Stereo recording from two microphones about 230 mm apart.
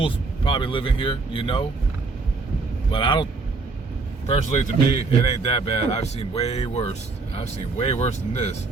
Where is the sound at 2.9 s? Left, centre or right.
Left.